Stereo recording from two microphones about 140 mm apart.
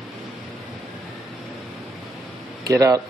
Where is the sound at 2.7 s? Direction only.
25° right (ahead or behind).